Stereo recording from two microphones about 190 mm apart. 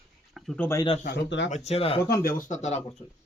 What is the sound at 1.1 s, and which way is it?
Speech, 65° left (ahead or behind).